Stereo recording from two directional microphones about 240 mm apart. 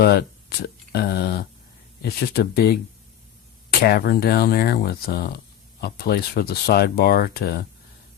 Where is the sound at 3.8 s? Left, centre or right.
Left.